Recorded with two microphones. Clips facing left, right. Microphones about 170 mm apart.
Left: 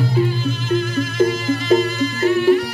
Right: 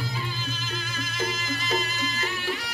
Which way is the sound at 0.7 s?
60° left (ahead or behind).